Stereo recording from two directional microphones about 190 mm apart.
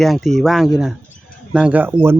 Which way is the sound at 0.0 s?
Centre (ahead or behind).